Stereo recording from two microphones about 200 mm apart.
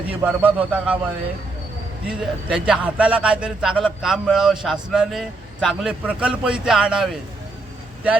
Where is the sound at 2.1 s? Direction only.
5° right (ahead or behind).